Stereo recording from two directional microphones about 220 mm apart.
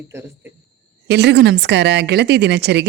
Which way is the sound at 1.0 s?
50° right (ahead or behind).